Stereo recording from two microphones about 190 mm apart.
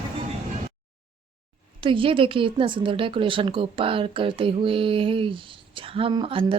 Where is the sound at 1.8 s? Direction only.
25° right (ahead or behind).